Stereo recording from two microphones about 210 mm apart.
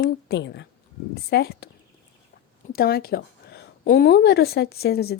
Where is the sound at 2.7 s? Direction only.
45° left (ahead or behind).